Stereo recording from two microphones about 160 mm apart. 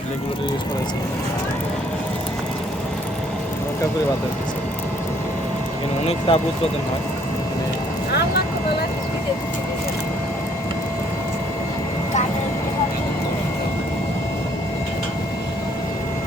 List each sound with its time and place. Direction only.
6.1 s speech: 35° left (ahead or behind)